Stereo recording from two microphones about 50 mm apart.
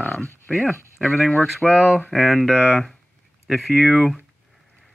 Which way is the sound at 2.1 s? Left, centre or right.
Centre.